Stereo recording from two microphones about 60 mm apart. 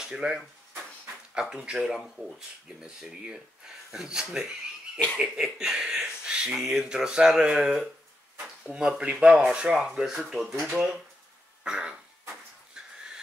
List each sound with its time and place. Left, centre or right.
0.0 s speech: centre
11.6 s cough: centre